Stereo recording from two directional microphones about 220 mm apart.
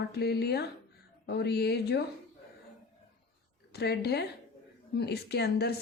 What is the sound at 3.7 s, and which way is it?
A woman's voice, 50° left (ahead or behind).